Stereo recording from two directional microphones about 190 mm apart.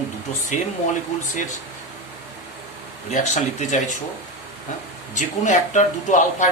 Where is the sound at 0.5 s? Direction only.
40° left (ahead or behind).